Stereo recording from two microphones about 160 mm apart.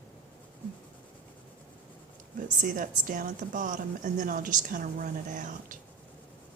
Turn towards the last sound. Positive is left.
turn(degrees=-55)  # may be behind; listen again after turning